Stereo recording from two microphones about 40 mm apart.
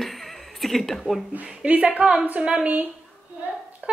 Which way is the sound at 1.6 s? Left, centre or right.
Right.